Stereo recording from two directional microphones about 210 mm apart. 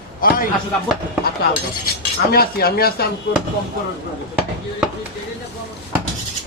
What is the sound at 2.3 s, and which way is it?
Speech, 45° left (ahead or behind).